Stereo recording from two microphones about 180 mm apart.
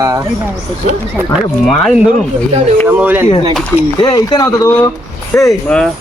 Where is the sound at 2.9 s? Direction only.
10° right (ahead or behind).